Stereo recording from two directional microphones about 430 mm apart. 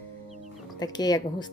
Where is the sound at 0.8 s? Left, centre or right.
Centre.